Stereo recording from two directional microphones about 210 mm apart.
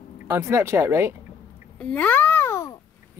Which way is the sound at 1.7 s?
5° left (ahead or behind).